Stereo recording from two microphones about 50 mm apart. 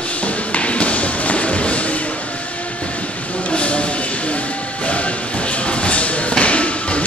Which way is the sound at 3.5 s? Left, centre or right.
Left.